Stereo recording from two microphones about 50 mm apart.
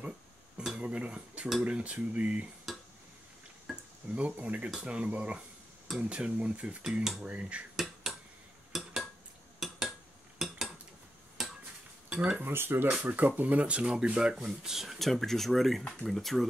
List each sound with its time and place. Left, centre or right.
0.7 s speech: right
2.7 s a sound: centre
4.1 s speech: right
6.8 s speech: centre
7.2 s speech: right
7.7 s cutlery: centre
8.7 s dishes: centre
10.4 s cutlery: centre
11.4 s dishes: centre
12.1 s speech: centre
12.4 s speech: right
13.0 s speech: right; by 15.0 s centre
15.0 s speech: centre